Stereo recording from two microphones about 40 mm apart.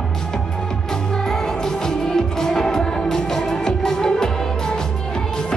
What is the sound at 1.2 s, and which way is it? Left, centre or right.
Music, centre.